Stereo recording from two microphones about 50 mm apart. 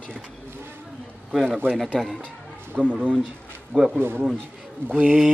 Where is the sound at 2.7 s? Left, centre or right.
Right.